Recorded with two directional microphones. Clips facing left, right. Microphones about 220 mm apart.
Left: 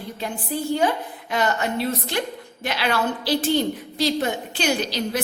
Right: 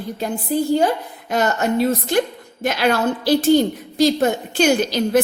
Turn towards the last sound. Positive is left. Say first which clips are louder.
# right 7 dB
turn(degrees=-50)  # may be behind; listen again after turning